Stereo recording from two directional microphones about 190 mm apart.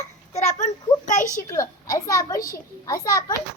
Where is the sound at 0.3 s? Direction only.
40° left (ahead or behind).